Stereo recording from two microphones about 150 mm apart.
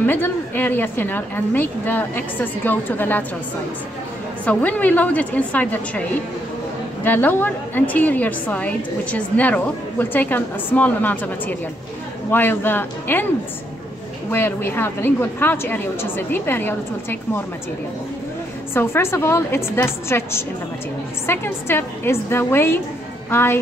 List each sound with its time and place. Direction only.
0.0 s a woman's voice: 15° left (ahead or behind)
4.5 s a woman's voice: 10° left (ahead or behind)
7.1 s a woman's voice: 10° left (ahead or behind)
14.3 s a woman's voice: 15° left (ahead or behind)
18.7 s a woman's voice: 15° left (ahead or behind)